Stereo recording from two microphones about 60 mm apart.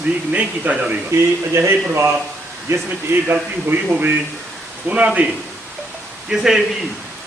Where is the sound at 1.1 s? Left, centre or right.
Right.